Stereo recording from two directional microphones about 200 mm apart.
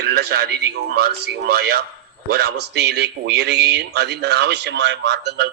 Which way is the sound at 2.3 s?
55° right (ahead or behind).